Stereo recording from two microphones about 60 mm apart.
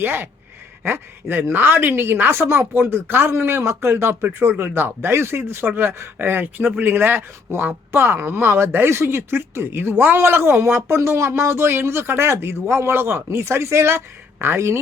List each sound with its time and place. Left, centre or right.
0.0 s speech: right